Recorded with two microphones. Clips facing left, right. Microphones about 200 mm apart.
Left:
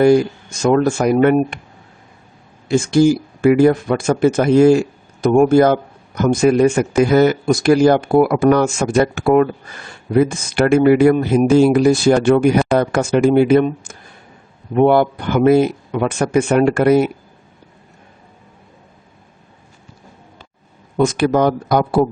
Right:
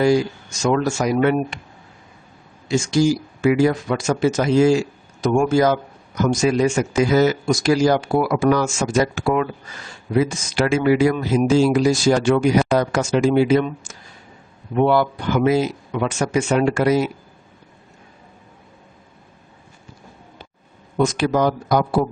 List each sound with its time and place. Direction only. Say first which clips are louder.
0.0 s speech: left 5 dB; 55° left (ahead or behind)
2.6 s speech: left 5 dB; 55° left (ahead or behind)
21.0 s speech: left 4 dB; 55° left (ahead or behind)